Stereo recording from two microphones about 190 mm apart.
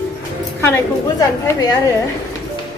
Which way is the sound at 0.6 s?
15° left (ahead or behind).